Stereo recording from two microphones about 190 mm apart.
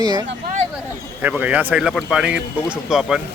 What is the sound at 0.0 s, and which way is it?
Speech, 20° right (ahead or behind).